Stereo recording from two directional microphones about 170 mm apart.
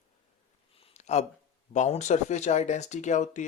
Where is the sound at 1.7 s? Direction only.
45° left (ahead or behind).